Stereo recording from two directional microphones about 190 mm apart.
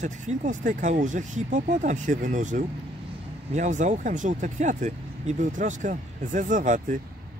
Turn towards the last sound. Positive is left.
turn(degrees=-40)  # may be behind; listen again after turning